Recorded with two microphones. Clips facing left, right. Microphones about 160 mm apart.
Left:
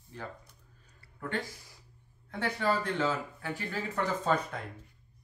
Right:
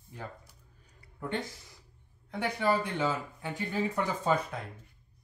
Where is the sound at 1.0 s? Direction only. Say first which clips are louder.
Right 1 dB; 20° right (ahead or behind).